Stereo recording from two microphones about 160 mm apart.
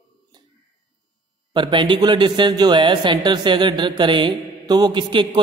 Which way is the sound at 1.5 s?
30° right (ahead or behind).